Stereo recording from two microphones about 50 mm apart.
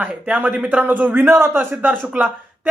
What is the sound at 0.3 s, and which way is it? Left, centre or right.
Speech, right.